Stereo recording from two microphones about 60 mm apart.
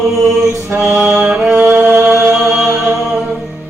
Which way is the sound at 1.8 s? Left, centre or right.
Right.